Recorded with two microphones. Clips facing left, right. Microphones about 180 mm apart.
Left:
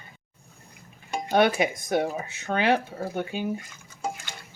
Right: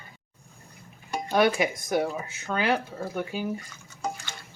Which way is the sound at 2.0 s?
50° left (ahead or behind).